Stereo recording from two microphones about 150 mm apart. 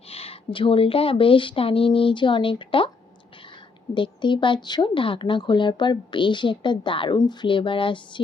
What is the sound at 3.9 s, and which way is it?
A woman's voice, 30° left (ahead or behind).